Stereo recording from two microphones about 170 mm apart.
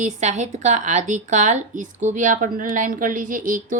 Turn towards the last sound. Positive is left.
turn(degrees=-50)  # may be behind; listen again after turning